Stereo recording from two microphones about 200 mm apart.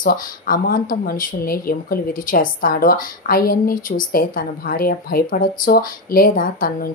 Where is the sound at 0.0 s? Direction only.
45° left (ahead or behind).